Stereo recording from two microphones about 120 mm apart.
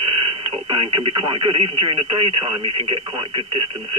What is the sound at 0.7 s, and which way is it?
Speech, 45° right (ahead or behind).